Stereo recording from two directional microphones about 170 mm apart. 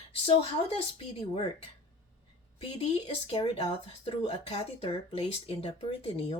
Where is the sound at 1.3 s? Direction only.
35° left (ahead or behind).